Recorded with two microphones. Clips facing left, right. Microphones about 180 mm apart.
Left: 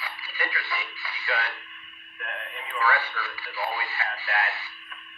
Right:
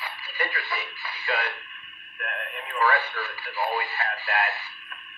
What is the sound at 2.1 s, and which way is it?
Radio, 50° right (ahead or behind).